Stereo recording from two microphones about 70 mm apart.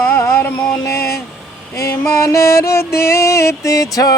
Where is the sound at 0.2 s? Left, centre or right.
Left.